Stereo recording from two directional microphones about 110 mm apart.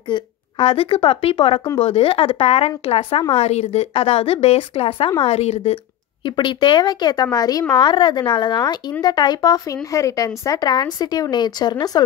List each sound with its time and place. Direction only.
0.1 s a woman's voice: 55° left (ahead or behind)
3.3 s a woman's voice: 75° left (ahead or behind); by 5.1 s 55° left (ahead or behind)
5.2 s speech: 75° left (ahead or behind)
6.2 s speech: 45° left (ahead or behind)